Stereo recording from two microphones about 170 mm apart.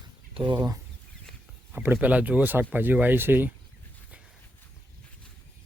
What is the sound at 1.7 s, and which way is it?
Speech, 10° right (ahead or behind).